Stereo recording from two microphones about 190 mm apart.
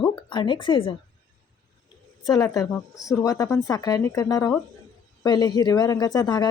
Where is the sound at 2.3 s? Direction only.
20° left (ahead or behind).